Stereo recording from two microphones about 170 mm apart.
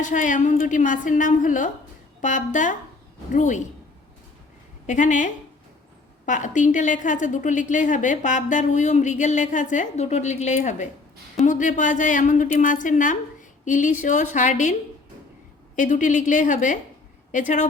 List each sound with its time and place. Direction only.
0.0 s a woman's voice: 50° left (ahead or behind)
4.9 s a woman's voice: 45° left (ahead or behind)